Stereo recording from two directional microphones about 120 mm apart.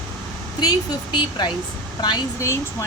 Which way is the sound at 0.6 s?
35° left (ahead or behind).